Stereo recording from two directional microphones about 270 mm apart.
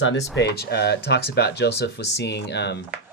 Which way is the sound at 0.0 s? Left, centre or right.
Left.